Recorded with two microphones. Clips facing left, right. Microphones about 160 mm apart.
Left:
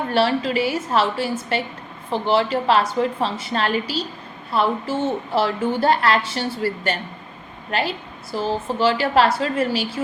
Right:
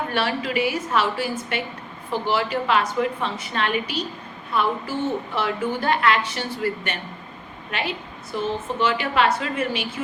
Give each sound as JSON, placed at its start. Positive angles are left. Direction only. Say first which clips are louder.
{"t": 0.1, "sound": "a woman's voice", "louder": "left 8 dB", "side_deg": 30}